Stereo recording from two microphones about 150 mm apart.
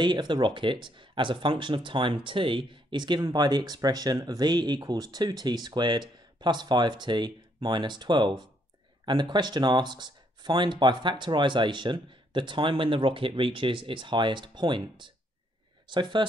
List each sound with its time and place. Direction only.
0.0 s speech: 30° right (ahead or behind)